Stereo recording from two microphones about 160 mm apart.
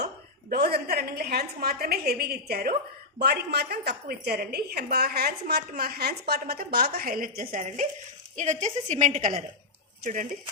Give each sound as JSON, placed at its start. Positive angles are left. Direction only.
{"t": 0.5, "sound": "a woman's voice", "side_deg": -75}
{"t": 3.2, "sound": "a woman's voice", "side_deg": -90}
{"t": 8.4, "sound": "a woman's voice", "side_deg": -50}